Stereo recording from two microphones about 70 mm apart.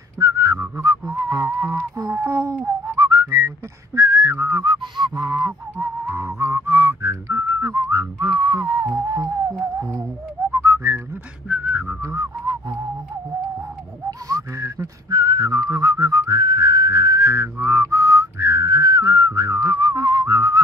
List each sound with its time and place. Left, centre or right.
0.2 s whistling: right
1.2 s music: right
2.1 s a sound: right
3.0 s whistling: right
4.6 s a sound: right
6.2 s music: right
6.6 s whistling: right
10.5 s whistling: right
11.4 s whistling: centre
12.0 s whistling: right
14.2 s whistling: right
15.0 s whistling: right